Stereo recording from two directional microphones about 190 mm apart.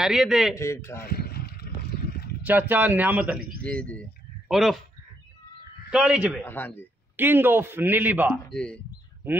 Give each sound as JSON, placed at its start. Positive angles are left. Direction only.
{"t": 0.0, "sound": "a man's voice", "side_deg": -5}
{"t": 0.6, "sound": "speech", "side_deg": 15}
{"t": 1.0, "sound": "a sound", "side_deg": 55}
{"t": 2.4, "sound": "a man's voice", "side_deg": -10}
{"t": 3.6, "sound": "a man's voice", "side_deg": 5}
{"t": 5.9, "sound": "a man's voice", "side_deg": -5}
{"t": 6.4, "sound": "speech", "side_deg": 10}
{"t": 7.2, "sound": "a man's voice", "side_deg": -10}
{"t": 8.5, "sound": "a man's voice", "side_deg": 5}